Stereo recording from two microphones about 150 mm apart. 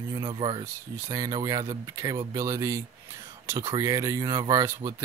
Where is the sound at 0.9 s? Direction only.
20° right (ahead or behind).